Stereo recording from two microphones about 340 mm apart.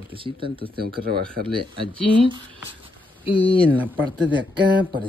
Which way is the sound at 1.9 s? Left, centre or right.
Centre.